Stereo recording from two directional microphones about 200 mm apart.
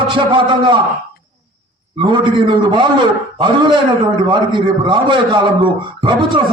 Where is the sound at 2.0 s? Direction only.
25° right (ahead or behind).